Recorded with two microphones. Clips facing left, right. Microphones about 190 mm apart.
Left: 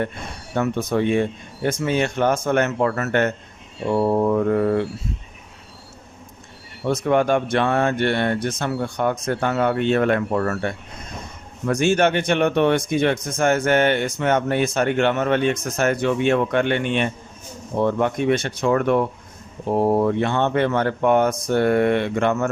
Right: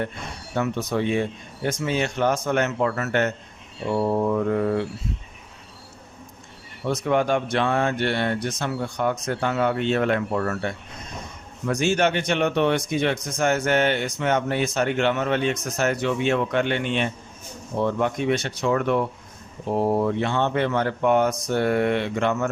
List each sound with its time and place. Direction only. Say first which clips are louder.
0.5 s speech: left 3 dB; 50° left (ahead or behind)
6.8 s speech: left 3 dB; 50° left (ahead or behind)